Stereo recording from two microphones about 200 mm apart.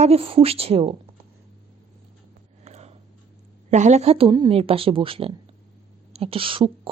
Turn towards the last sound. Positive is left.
turn(degrees=-25)  # may be behind; listen again after turning